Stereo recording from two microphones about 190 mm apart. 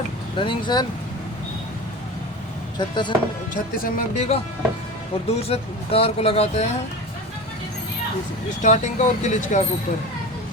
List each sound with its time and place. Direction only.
0.3 s speech: 25° left (ahead or behind)
2.7 s speech: 25° left (ahead or behind)
3.5 s speech: 40° left (ahead or behind)
8.6 s speech: 40° left (ahead or behind)